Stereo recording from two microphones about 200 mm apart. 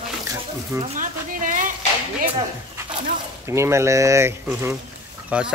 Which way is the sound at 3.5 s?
15° right (ahead or behind).